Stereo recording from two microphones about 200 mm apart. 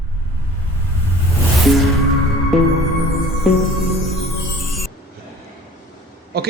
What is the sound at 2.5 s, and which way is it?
Music, centre (ahead or behind).